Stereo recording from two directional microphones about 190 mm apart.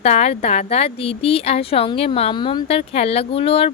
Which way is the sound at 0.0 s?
35° left (ahead or behind).